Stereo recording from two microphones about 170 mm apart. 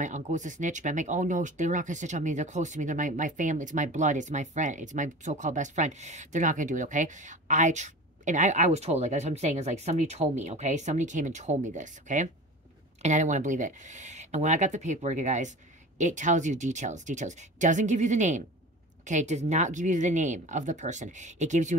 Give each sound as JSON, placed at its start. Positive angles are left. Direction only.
{"t": 0.0, "sound": "speech", "side_deg": -45}